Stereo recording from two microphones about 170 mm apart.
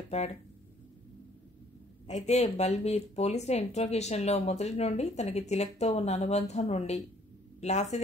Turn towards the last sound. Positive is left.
turn(degrees=40)  # may be behind; listen again after turning